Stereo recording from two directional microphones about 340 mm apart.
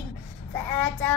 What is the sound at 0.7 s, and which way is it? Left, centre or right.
Child singing, centre.